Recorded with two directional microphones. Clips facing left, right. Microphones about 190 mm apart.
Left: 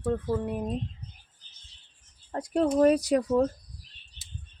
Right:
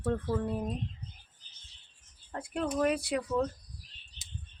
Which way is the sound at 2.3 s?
35° left (ahead or behind).